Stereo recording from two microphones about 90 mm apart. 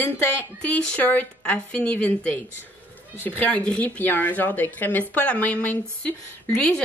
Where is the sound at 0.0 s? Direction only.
20° left (ahead or behind).